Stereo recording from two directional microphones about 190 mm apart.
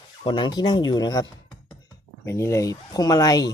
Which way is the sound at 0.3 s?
25° left (ahead or behind).